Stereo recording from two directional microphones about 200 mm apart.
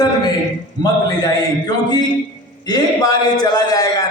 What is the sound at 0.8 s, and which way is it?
A man's voice, 20° left (ahead or behind).